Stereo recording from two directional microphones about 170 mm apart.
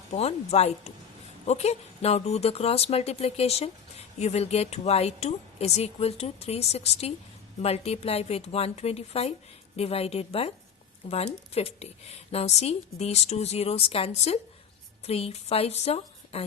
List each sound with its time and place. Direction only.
0.1 s speech: 40° left (ahead or behind)